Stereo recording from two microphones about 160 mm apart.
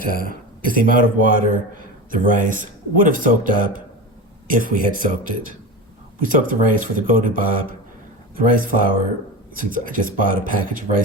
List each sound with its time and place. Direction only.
0.0 s speech: 70° left (ahead or behind)
0.6 s a man's voice: 60° right (ahead or behind)